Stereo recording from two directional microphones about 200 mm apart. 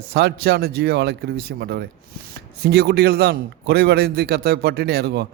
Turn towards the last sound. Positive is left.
turn(degrees=-55)  # may be behind; listen again after turning